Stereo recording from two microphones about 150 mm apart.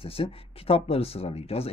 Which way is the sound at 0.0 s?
40° left (ahead or behind).